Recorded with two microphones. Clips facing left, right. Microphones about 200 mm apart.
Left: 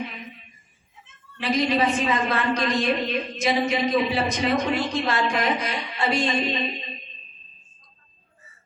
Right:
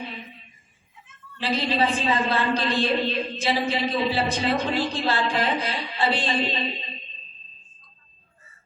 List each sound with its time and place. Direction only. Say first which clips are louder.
1.4 s a woman's voice: left 2 dB; 30° right (ahead or behind)